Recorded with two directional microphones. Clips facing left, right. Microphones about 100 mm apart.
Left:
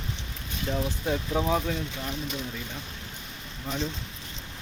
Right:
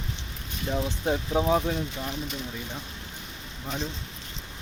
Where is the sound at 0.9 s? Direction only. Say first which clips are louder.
Right 1 dB; 25° right (ahead or behind).